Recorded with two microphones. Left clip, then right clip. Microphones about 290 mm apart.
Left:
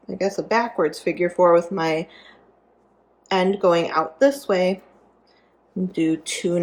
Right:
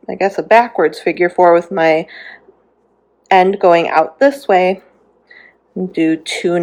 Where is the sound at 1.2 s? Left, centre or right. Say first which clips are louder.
Right 6 dB; right.